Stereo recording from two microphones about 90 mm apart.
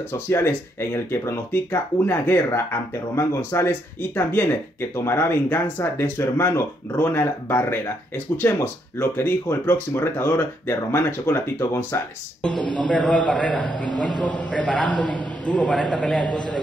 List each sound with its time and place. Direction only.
0.1 s speech: 25° left (ahead or behind)
12.8 s a man's voice: 5° left (ahead or behind)
15.7 s a man's voice: centre (ahead or behind)